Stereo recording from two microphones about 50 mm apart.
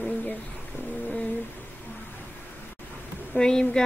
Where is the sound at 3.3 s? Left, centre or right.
Centre.